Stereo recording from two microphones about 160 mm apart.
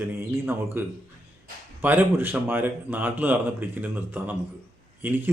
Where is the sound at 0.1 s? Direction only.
15° right (ahead or behind).